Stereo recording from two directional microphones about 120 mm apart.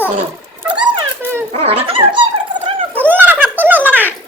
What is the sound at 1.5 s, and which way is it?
Dog, 55° right (ahead or behind).